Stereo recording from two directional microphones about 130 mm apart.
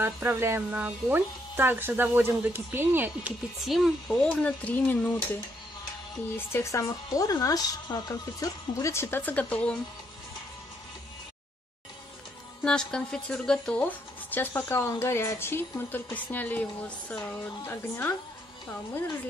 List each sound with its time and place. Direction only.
0.0 s speech: 15° right (ahead or behind)
3.6 s speech: centre (ahead or behind)
6.3 s speech: 20° left (ahead or behind)
12.6 s speech: 5° left (ahead or behind)